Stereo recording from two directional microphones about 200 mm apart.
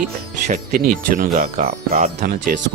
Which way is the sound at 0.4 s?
40° right (ahead or behind).